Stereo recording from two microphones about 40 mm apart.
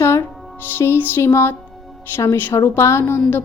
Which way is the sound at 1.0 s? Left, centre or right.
Left.